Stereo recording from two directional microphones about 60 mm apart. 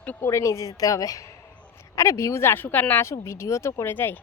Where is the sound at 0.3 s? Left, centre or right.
Left.